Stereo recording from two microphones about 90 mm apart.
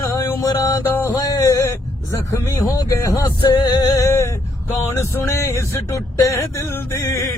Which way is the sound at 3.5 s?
50° left (ahead or behind).